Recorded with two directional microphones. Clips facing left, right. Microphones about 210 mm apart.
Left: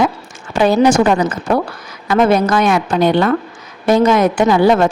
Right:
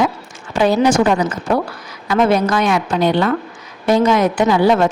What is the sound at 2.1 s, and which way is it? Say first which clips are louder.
A woman's voice: left 2 dB; 50° left (ahead or behind).